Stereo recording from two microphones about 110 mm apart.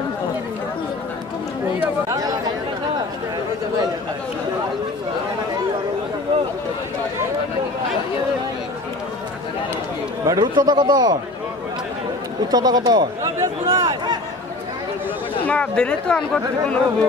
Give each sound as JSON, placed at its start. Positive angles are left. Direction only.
{"t": 2.0, "sound": "chatter", "side_deg": -35}
{"t": 10.2, "sound": "a man's voice", "side_deg": -35}
{"t": 12.4, "sound": "a sound", "side_deg": -40}
{"t": 15.4, "sound": "a woman's voice", "side_deg": 10}